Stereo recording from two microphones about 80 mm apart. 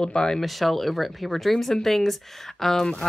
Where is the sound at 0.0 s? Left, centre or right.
Centre.